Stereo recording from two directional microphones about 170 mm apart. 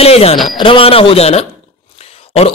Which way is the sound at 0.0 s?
35° left (ahead or behind).